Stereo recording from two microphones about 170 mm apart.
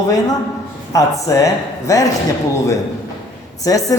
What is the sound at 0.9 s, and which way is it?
A man's voice, 20° left (ahead or behind).